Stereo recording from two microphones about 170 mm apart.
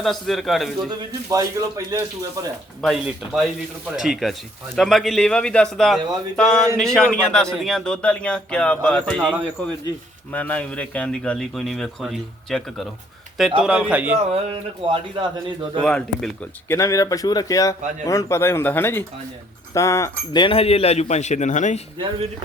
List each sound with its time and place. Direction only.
0.0 s a man's voice: centre (ahead or behind)
0.9 s speech: 20° right (ahead or behind)
2.8 s a man's voice: centre (ahead or behind)
14.5 s speech: 30° right (ahead or behind)
15.8 s speech: 5° left (ahead or behind)
20.4 s a man's voice: 35° left (ahead or behind)